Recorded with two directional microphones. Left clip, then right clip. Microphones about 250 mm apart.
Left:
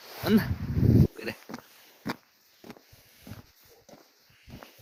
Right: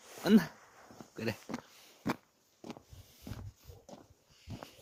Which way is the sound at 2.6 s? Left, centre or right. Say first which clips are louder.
Even; left.